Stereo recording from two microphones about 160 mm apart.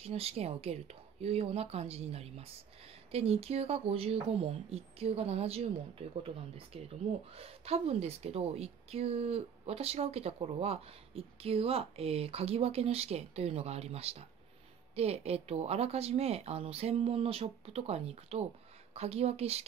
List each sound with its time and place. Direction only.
0.0 s speech: 40° right (ahead or behind)